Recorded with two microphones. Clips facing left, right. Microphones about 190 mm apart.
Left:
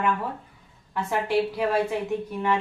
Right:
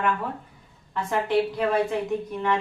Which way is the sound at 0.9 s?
10° left (ahead or behind).